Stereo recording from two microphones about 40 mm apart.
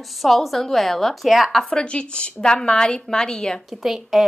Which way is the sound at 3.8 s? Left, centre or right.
Centre.